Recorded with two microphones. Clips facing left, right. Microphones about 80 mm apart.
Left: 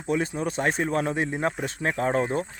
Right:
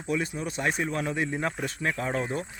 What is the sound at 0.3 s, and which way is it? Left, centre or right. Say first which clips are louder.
Speech: left 4 dB; left.